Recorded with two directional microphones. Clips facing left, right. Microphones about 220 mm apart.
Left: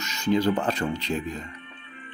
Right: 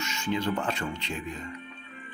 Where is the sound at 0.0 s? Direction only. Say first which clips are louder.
Left 6 dB; 40° left (ahead or behind).